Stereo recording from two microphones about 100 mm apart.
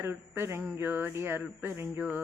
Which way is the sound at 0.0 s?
25° right (ahead or behind).